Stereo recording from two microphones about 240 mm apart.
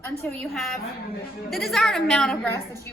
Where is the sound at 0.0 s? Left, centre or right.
Centre.